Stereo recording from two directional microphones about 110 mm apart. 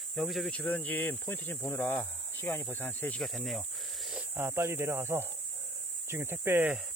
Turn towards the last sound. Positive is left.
turn(degrees=-20)  # may be behind; listen again after turning